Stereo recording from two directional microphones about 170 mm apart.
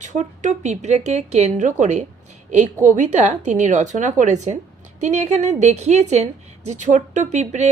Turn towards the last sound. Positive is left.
turn(degrees=-40)  # may be behind; listen again after turning